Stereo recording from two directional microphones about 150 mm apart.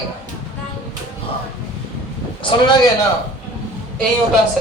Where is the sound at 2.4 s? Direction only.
35° left (ahead or behind).